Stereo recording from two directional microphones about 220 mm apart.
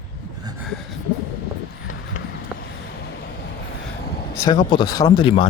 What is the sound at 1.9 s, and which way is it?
Clip-clop, 35° left (ahead or behind).